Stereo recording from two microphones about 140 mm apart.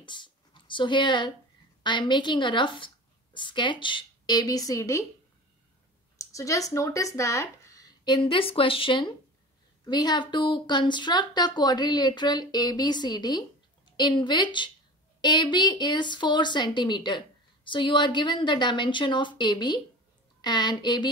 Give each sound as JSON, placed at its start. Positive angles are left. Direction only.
{"t": 0.0, "sound": "a sound", "side_deg": 35}
{"t": 1.8, "sound": "speech", "side_deg": 35}
{"t": 6.1, "sound": "speech", "side_deg": 20}